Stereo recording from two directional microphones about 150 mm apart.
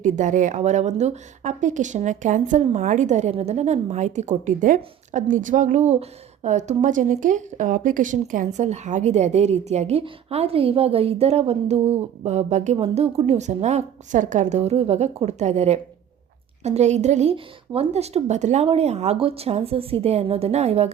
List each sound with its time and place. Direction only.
0.0 s speech: 55° right (ahead or behind)